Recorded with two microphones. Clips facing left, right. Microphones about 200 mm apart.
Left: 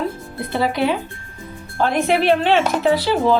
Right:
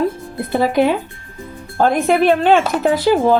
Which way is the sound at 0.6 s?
50° right (ahead or behind).